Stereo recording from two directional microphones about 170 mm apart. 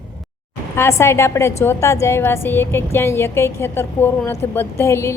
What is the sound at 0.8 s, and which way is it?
A woman's voice, 15° left (ahead or behind).